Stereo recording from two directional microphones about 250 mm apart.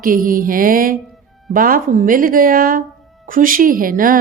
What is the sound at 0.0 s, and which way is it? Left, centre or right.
A woman's voice, right.